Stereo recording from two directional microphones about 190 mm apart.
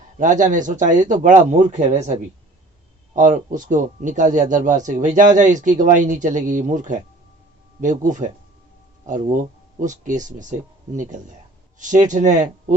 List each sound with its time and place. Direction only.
0.2 s speech: 40° right (ahead or behind)